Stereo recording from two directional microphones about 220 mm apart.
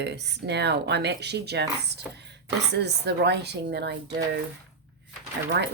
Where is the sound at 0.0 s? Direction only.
50° right (ahead or behind).